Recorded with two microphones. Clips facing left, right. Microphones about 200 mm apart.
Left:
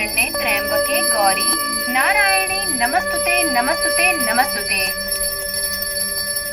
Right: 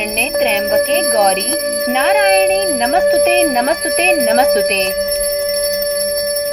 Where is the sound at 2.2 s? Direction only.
60° right (ahead or behind).